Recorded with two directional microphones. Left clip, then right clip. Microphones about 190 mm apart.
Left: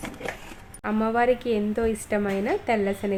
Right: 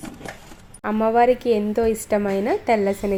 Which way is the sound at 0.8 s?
15° right (ahead or behind).